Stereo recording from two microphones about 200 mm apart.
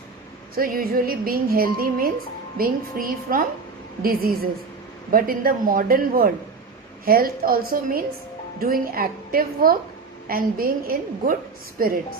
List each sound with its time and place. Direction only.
0.5 s speech: 45° right (ahead or behind)